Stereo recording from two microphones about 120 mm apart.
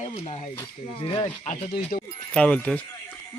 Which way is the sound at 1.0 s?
45° left (ahead or behind).